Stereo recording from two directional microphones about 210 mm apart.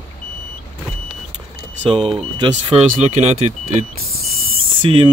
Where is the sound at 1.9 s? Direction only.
25° right (ahead or behind).